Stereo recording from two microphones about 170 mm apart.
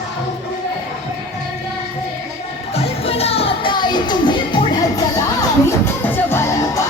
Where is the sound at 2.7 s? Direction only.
35° left (ahead or behind).